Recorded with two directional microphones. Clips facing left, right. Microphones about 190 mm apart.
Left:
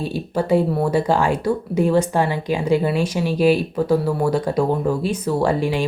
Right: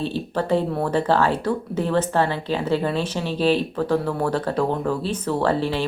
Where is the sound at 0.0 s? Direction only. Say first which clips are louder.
Left 2 dB; 10° left (ahead or behind).